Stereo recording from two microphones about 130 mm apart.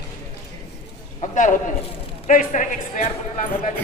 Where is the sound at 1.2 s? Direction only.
70° left (ahead or behind).